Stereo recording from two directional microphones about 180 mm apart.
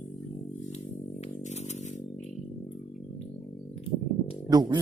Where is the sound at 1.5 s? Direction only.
40° left (ahead or behind).